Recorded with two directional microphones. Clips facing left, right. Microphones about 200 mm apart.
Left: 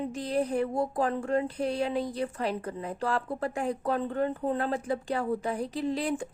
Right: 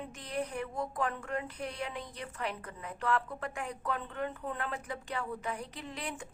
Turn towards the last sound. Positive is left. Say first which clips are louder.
# left 12 dB
turn(degrees=35)  # may be behind; listen again after turning